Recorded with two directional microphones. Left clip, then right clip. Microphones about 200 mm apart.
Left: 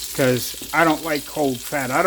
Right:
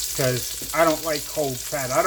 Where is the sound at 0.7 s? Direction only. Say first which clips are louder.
Left 2 dB; 60° left (ahead or behind).